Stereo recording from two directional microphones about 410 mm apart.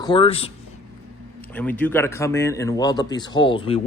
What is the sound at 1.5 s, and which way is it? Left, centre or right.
Speech, centre.